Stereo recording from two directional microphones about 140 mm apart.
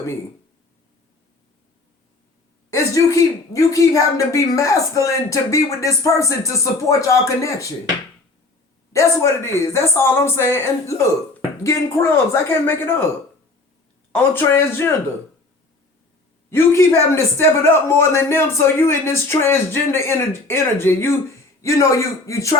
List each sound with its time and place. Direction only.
2.6 s a man's voice: 20° left (ahead or behind)
8.9 s a man's voice: 20° left (ahead or behind)
14.1 s a man's voice: 15° left (ahead or behind)
16.5 s a man's voice: 20° left (ahead or behind)